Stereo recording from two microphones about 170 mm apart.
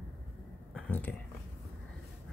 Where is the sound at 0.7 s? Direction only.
10° left (ahead or behind).